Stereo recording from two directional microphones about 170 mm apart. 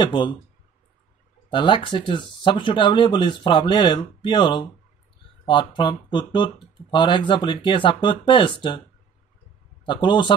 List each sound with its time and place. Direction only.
0.0 s speech: 30° left (ahead or behind)
1.5 s speech: 30° left (ahead or behind)
9.8 s speech: 30° left (ahead or behind)